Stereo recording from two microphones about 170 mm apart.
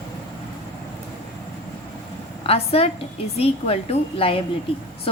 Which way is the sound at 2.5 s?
35° left (ahead or behind).